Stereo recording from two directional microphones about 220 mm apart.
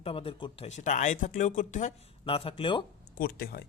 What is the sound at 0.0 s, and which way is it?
Speech, 25° left (ahead or behind).